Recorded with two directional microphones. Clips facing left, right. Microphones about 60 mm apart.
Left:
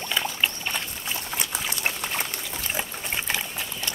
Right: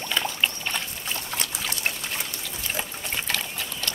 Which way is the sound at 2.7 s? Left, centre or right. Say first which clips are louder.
Even; centre.